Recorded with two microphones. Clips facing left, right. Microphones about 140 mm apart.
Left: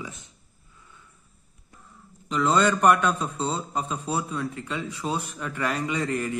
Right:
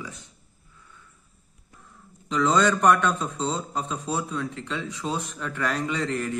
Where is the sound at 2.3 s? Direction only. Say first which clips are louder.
Even; 5° left (ahead or behind).